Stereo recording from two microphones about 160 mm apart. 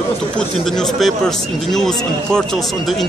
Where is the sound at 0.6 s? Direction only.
Centre (ahead or behind).